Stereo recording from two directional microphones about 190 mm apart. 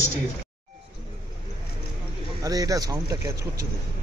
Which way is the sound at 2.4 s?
20° right (ahead or behind).